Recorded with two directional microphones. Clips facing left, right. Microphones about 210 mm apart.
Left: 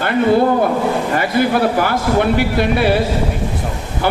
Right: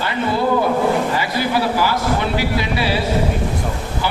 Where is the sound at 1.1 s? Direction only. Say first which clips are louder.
Left 4 dB; 55° left (ahead or behind).